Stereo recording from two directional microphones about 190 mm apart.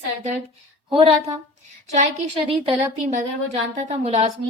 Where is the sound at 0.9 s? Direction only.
30° right (ahead or behind).